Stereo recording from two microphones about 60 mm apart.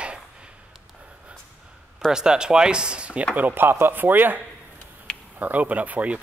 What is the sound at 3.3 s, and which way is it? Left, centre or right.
Speech, right.